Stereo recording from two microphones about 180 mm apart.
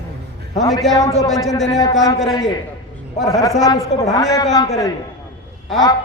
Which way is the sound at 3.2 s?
20° left (ahead or behind).